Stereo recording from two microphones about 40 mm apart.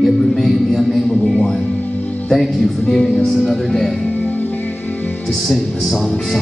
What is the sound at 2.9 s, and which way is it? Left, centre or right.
Music, centre.